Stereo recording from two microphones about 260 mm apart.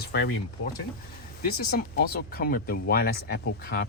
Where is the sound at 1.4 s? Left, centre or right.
Left.